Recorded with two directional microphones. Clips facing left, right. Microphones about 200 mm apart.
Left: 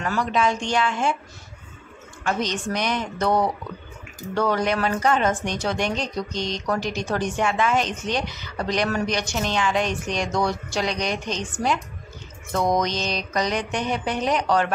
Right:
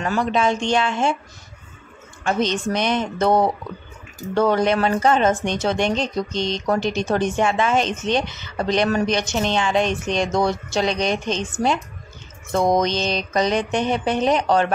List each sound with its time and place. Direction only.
0.0 s speech: 25° right (ahead or behind)
2.2 s speech: 25° right (ahead or behind)